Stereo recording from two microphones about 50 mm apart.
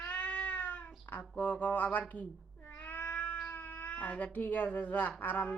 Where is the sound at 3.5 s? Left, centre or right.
Left.